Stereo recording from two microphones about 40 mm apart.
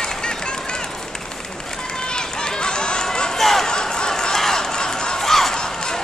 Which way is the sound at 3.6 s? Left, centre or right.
Centre.